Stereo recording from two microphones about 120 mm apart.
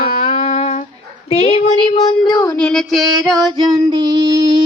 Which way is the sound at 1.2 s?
55° left (ahead or behind).